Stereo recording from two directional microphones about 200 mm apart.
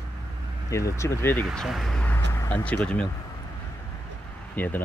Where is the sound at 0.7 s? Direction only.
15° left (ahead or behind).